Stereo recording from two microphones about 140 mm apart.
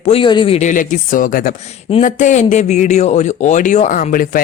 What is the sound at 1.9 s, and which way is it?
A man's voice, 60° left (ahead or behind).